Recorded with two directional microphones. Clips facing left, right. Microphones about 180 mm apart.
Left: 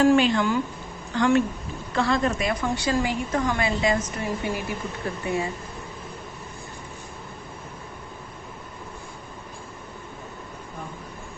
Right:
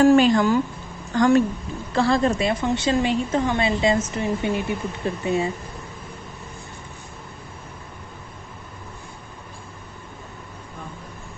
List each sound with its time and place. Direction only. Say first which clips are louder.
0.0 s a woman's voice: right 4 dB; 40° right (ahead or behind); by 5.5 s 25° right (ahead or behind)